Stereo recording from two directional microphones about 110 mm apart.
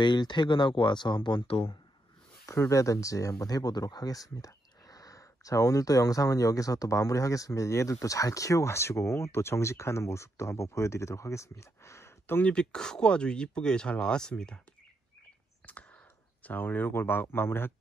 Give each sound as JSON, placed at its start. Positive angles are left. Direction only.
{"t": 0.0, "sound": "speech", "side_deg": 40}
{"t": 2.7, "sound": "speech", "side_deg": 30}
{"t": 12.4, "sound": "speech", "side_deg": 5}
{"t": 15.6, "sound": "a sound", "side_deg": 15}
{"t": 16.4, "sound": "speech", "side_deg": 15}